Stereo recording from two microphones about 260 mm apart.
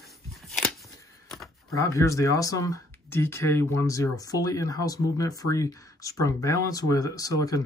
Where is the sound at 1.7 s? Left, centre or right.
Centre.